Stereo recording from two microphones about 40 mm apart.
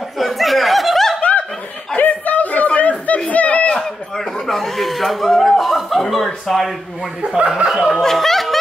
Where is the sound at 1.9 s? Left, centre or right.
Left.